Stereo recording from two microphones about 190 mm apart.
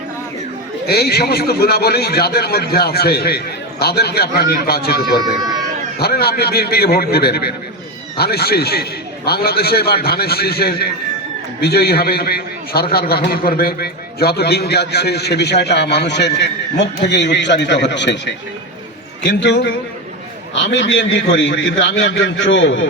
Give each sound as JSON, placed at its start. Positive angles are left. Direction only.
{"t": 0.9, "sound": "a man's voice", "side_deg": 55}